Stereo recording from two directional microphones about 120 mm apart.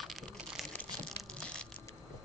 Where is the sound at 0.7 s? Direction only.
10° left (ahead or behind).